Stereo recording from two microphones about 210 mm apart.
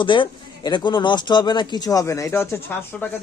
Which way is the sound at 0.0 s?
25° left (ahead or behind).